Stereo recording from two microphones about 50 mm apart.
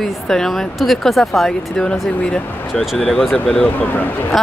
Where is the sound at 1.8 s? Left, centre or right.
Left.